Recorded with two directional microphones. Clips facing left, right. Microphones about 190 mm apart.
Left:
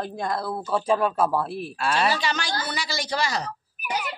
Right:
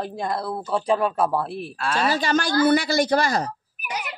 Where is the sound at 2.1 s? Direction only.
50° right (ahead or behind).